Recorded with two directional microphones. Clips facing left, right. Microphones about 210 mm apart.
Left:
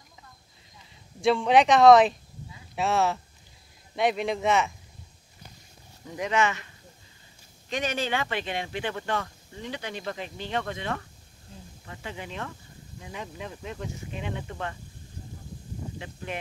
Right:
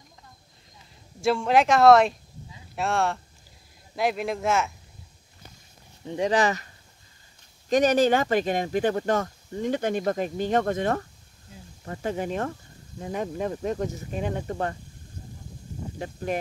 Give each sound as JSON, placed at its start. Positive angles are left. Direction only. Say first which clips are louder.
{"t": 1.2, "sound": "speech", "louder": "left 1 dB", "side_deg": 0}
{"t": 6.0, "sound": "speech", "louder": "right 4 dB", "side_deg": -30}
{"t": 7.7, "sound": "speech", "louder": "right 10 dB", "side_deg": -40}
{"t": 16.0, "sound": "speech", "louder": "right 10 dB", "side_deg": -40}